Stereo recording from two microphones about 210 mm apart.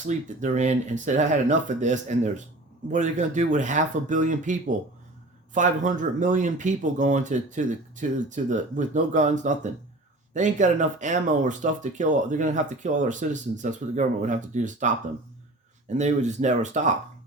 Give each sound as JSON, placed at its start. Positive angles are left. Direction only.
{"t": 0.4, "sound": "speech", "side_deg": -35}
{"t": 16.0, "sound": "speech", "side_deg": -35}